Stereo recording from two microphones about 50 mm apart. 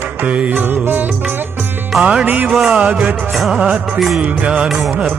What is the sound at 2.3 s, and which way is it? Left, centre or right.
Speech, right.